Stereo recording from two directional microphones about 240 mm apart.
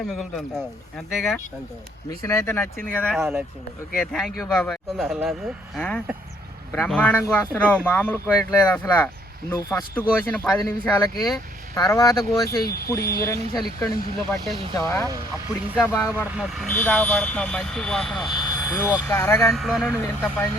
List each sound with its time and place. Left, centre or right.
0.1 s speech: centre
2.0 s speech: centre
3.2 s speech: centre
13.0 s speech: left
13.2 s speech: centre
14.3 s speech: centre
14.8 s speech: centre
16.2 s speech: centre
16.7 s speech: centre
18.3 s speech: centre